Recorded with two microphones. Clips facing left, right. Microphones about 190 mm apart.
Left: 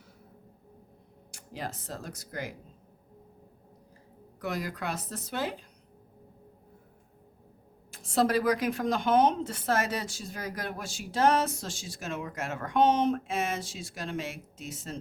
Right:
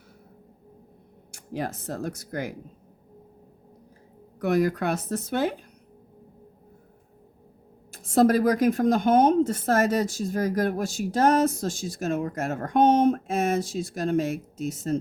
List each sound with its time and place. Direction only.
1.5 s speech: 55° right (ahead or behind)
4.4 s speech: 55° right (ahead or behind)
7.9 s a woman's voice: 45° right (ahead or behind)